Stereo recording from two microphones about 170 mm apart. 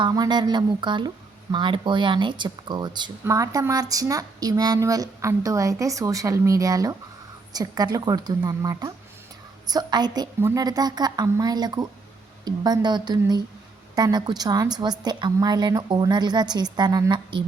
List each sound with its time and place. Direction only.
0.0 s speech: 25° right (ahead or behind)